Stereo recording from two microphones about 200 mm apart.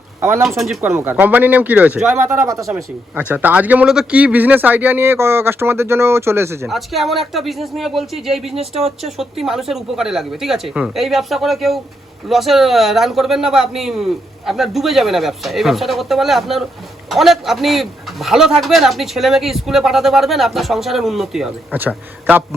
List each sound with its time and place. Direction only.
0.2 s speech: 15° right (ahead or behind)
0.4 s a man's voice: centre (ahead or behind)
6.7 s a man's voice: centre (ahead or behind)
8.5 s speech: 30° right (ahead or behind)
9.0 s a man's voice: centre (ahead or behind)